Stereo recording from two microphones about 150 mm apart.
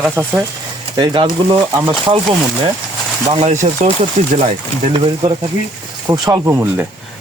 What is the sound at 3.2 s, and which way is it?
Speech, 50° right (ahead or behind).